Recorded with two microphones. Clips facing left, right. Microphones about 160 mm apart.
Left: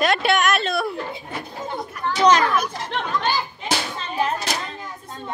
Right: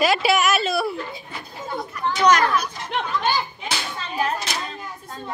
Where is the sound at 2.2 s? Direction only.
30° left (ahead or behind).